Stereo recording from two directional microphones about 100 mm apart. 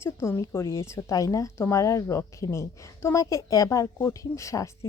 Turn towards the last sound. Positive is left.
turn(degrees=30)  # may be behind; listen again after turning